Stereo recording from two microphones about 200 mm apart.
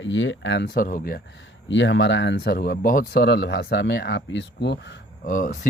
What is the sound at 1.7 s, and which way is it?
Speech, 65° left (ahead or behind).